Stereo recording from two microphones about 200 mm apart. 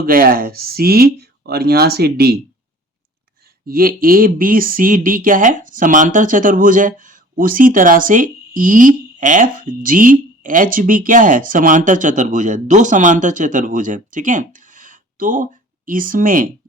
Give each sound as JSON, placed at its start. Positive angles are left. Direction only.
{"t": 0.0, "sound": "speech", "side_deg": -45}
{"t": 3.4, "sound": "speech", "side_deg": -45}